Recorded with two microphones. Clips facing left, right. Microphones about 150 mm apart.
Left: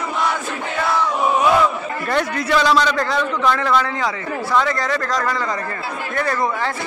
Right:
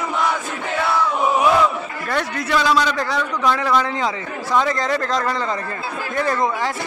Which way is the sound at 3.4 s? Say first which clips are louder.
Right 1 dB; 15° right (ahead or behind).